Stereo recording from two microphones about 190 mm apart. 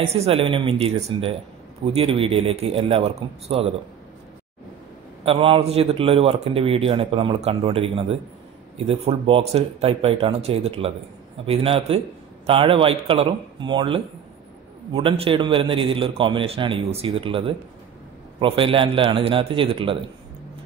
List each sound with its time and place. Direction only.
0.0 s speech: 35° right (ahead or behind)
5.2 s a man's voice: 30° right (ahead or behind)